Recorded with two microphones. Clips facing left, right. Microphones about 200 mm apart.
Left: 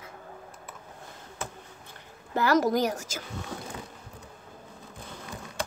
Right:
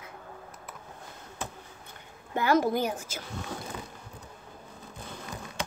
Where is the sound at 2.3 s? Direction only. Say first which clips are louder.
Left 1 dB; 40° left (ahead or behind).